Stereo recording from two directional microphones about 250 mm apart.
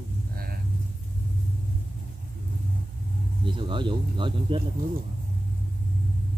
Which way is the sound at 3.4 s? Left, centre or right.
Centre.